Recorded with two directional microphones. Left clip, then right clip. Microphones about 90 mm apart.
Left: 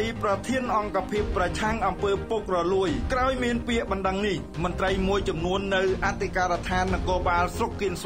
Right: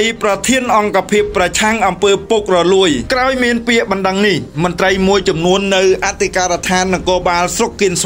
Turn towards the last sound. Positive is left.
turn(degrees=-40)  # may be behind; listen again after turning